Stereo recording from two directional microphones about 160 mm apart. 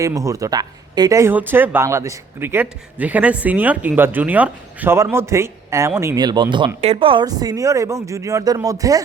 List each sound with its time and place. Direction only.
0.0 s speech: 20° right (ahead or behind)